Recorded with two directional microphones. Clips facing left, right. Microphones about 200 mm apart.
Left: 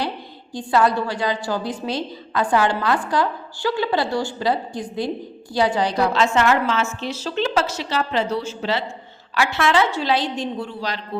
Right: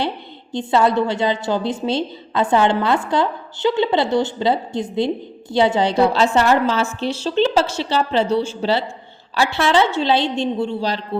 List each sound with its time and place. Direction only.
0.5 s a woman's voice: 25° right (ahead or behind)